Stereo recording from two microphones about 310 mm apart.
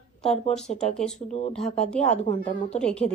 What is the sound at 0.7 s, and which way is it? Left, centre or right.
Speech, left.